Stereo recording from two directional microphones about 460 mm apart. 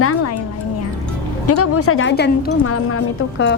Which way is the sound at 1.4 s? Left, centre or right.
Left.